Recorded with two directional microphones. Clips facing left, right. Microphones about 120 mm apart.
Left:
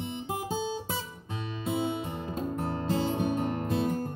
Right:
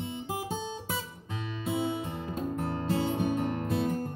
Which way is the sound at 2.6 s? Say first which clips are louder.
Even; 35° left (ahead or behind).